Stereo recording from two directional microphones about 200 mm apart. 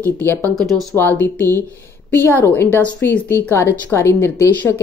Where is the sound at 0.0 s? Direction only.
10° left (ahead or behind).